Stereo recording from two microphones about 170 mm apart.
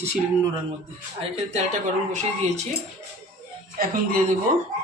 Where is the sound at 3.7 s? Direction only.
55° right (ahead or behind).